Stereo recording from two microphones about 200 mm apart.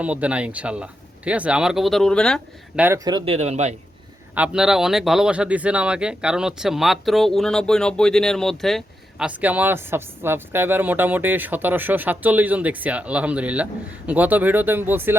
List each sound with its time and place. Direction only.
0.0 s speech: 5° right (ahead or behind)
2.7 s a man's voice: 10° right (ahead or behind); by 3.8 s 35° right (ahead or behind)
4.4 s speech: 5° right (ahead or behind)